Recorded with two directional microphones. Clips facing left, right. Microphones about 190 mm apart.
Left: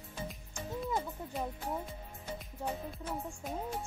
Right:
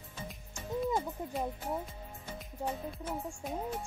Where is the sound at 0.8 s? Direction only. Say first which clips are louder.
Right 3 dB; 15° right (ahead or behind).